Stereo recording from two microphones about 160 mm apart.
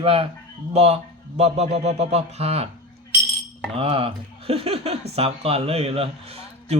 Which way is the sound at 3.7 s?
35° right (ahead or behind).